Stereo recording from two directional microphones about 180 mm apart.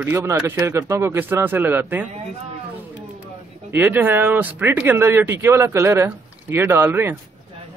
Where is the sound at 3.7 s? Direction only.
10° right (ahead or behind).